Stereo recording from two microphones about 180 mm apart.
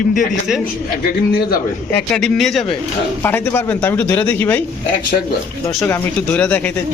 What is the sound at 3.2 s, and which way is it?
Speech, 10° left (ahead or behind).